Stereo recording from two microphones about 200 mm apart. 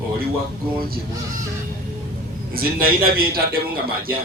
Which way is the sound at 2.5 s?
50° right (ahead or behind).